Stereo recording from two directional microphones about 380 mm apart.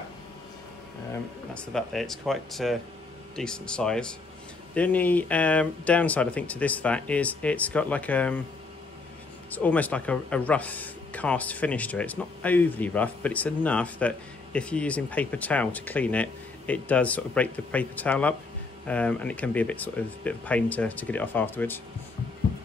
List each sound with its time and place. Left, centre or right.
1.5 s speech: centre
9.5 s speech: centre